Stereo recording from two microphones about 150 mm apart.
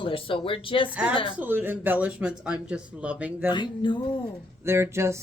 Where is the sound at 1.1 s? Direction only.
35° left (ahead or behind).